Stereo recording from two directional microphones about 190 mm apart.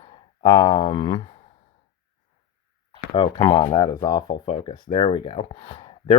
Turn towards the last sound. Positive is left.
turn(degrees=30)  # may be behind; listen again after turning